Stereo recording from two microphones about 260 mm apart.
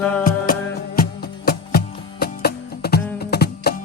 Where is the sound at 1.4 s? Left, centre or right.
Left.